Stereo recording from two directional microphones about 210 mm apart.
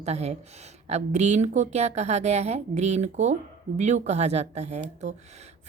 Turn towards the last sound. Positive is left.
turn(degrees=-30)  # may be behind; listen again after turning